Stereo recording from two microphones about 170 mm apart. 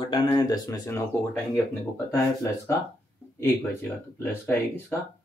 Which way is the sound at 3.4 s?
15° left (ahead or behind).